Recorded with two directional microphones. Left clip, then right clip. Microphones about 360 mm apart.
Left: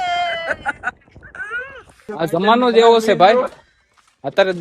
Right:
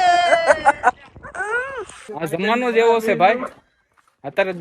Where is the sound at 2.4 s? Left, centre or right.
Centre.